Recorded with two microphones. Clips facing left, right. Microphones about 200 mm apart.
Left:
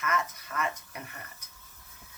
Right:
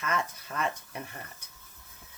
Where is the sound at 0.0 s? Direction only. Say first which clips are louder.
Even; 30° right (ahead or behind).